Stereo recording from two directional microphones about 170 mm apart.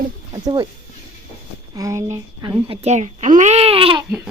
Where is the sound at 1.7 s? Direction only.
20° right (ahead or behind).